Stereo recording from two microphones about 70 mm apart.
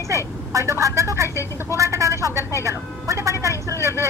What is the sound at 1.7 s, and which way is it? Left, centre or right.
Vehicle, right.